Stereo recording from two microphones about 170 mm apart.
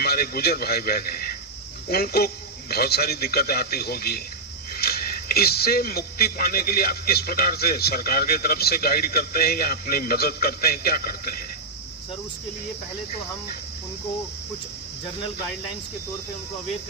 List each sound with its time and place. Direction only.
0.0 s a man's voice: 65° left (ahead or behind)